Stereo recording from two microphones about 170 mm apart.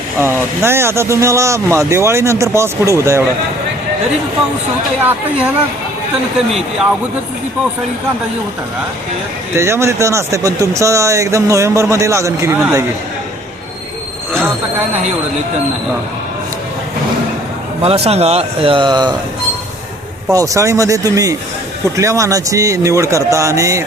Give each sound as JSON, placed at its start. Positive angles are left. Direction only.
{"t": 0.2, "sound": "speech", "side_deg": -15}
{"t": 9.6, "sound": "speech", "side_deg": -15}
{"t": 17.8, "sound": "speech", "side_deg": -35}
{"t": 20.3, "sound": "speech", "side_deg": -20}